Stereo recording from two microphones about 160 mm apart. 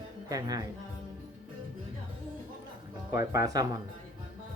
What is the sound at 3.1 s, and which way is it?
Speech, 20° right (ahead or behind).